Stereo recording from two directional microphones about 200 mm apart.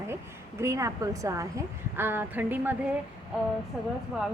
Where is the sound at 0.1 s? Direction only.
10° right (ahead or behind).